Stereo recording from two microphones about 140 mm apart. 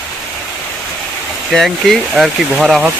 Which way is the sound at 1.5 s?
Centre (ahead or behind).